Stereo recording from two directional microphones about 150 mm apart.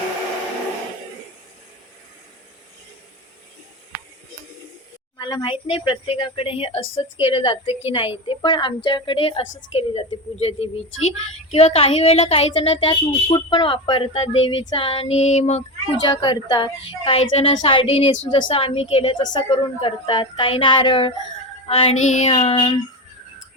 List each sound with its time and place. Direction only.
5.1 s speech: 30° left (ahead or behind); by 15.6 s 45° left (ahead or behind)
16.0 s speech: 30° left (ahead or behind)
19.2 s speech: 30° left (ahead or behind)
22.0 s speech: 50° left (ahead or behind)